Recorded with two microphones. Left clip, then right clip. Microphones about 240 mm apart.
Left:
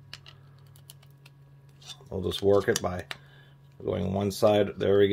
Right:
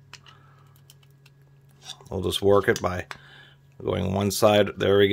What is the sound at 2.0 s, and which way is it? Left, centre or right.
Speech, right.